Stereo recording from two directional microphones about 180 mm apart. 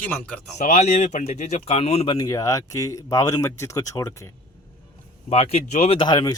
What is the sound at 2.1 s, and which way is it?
Speech, 20° left (ahead or behind).